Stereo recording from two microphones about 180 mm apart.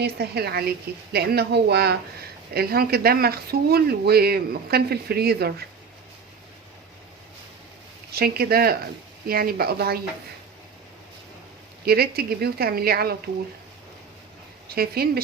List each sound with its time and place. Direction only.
0.0 s speech: 60° right (ahead or behind)
8.1 s speech: 60° right (ahead or behind)
11.9 s speech: 60° right (ahead or behind)
14.7 s speech: 60° right (ahead or behind)